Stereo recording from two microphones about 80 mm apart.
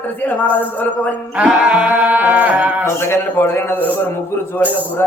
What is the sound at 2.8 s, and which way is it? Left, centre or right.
A man's voice, left.